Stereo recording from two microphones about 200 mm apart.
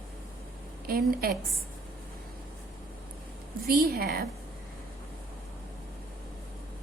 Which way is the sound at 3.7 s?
50° right (ahead or behind).